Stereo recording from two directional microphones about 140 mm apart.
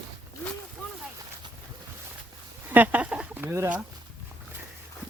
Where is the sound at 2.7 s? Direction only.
10° right (ahead or behind).